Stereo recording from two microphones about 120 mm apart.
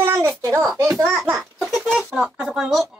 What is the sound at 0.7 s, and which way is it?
Speech, 25° right (ahead or behind).